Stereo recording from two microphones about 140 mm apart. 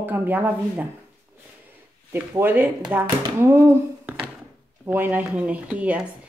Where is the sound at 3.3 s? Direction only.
20° right (ahead or behind).